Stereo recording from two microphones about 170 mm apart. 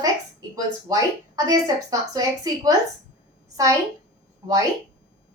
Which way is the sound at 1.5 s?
20° right (ahead or behind).